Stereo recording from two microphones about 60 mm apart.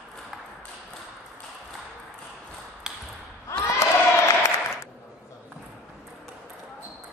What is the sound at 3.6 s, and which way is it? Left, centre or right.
Crowd, left.